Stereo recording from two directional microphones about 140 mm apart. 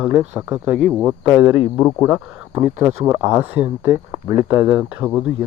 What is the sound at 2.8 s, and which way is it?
Speech, 25° right (ahead or behind).